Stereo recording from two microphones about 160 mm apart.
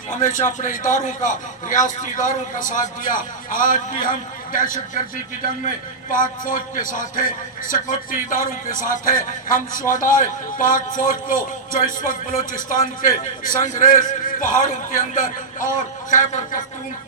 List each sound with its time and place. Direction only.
0.1 s a man's voice: 55° left (ahead or behind)